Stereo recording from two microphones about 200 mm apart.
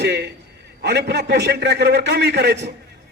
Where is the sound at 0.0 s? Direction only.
55° right (ahead or behind).